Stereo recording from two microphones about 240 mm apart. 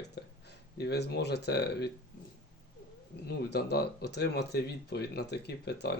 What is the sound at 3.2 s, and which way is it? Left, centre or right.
Speech, left.